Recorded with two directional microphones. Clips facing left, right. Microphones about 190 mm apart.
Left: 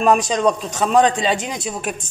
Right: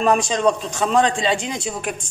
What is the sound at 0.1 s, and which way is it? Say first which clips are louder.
A man's voice: left 1 dB; 20° left (ahead or behind).